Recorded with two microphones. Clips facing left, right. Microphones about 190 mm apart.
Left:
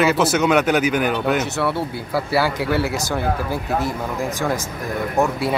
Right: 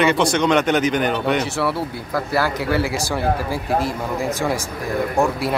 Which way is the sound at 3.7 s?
30° right (ahead or behind).